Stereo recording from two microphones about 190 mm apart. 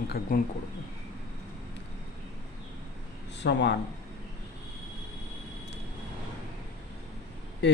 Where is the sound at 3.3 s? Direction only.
65° left (ahead or behind).